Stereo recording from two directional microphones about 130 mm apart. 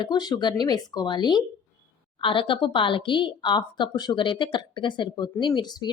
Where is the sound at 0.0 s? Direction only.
30° left (ahead or behind).